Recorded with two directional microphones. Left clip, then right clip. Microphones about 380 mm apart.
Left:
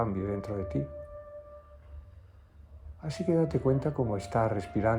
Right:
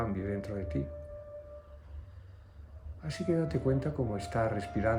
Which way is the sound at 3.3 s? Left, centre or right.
Centre.